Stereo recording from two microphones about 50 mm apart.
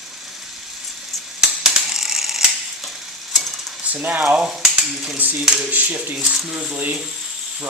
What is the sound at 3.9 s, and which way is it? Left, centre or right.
Speech, right.